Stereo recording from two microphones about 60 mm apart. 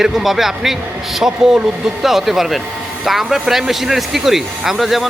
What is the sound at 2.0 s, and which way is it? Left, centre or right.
Speech, centre.